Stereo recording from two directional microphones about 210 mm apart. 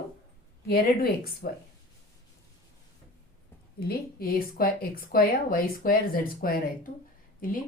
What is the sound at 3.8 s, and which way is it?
A woman's voice, 45° left (ahead or behind).